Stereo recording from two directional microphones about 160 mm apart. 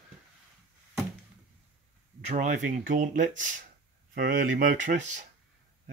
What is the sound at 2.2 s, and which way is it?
Speech, 50° right (ahead or behind).